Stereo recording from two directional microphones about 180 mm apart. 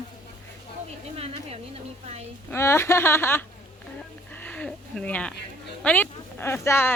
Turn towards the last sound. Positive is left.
turn(degrees=15)  # may be behind; listen again after turning